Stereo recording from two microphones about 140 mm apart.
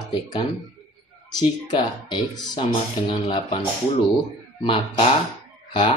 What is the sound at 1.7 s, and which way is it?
Speech, 35° left (ahead or behind).